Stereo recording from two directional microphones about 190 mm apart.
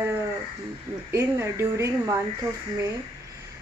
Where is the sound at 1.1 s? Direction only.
15° right (ahead or behind).